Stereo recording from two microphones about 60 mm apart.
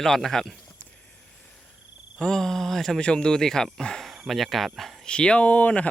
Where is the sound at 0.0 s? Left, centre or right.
Centre.